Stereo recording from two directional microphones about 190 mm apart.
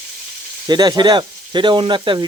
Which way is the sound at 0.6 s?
20° right (ahead or behind).